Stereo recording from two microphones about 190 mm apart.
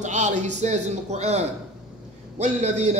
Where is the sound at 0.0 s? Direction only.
40° right (ahead or behind).